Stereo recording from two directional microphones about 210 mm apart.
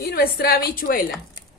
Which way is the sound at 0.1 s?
45° left (ahead or behind).